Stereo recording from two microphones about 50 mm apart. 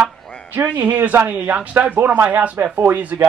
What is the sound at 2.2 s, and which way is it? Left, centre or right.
Speech, right.